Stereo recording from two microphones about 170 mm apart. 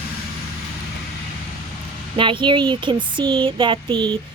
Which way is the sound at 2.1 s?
30° right (ahead or behind).